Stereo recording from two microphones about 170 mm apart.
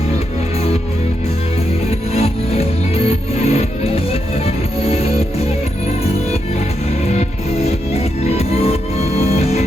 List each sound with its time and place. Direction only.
1.9 s music: 40° left (ahead or behind)
7.2 s music: 40° left (ahead or behind)